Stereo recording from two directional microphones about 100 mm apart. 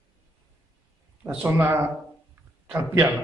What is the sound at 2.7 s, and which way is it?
Speech, 20° right (ahead or behind).